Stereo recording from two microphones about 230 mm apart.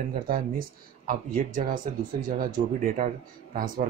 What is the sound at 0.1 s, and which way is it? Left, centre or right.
Speech, right.